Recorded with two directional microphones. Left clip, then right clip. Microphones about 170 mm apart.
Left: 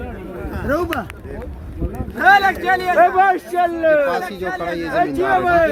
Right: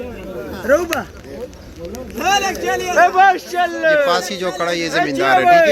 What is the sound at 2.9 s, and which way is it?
Speech, 75° left (ahead or behind).